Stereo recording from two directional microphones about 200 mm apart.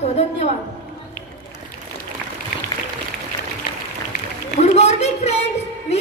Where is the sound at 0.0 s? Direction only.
30° left (ahead or behind).